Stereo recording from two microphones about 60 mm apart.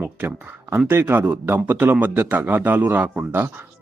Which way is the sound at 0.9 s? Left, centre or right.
Right.